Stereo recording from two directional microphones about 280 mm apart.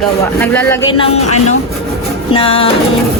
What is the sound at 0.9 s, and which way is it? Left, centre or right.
A woman's voice, left.